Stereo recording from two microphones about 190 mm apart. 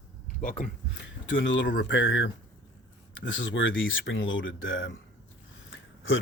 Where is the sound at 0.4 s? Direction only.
45° left (ahead or behind).